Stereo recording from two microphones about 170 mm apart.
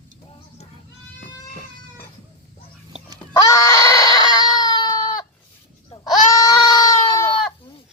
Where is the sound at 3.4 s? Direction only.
20° left (ahead or behind).